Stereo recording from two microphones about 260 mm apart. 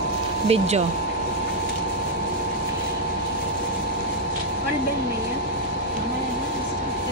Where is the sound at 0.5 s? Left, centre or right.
Right.